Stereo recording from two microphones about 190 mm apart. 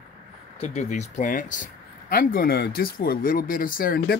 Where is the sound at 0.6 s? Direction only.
35° left (ahead or behind).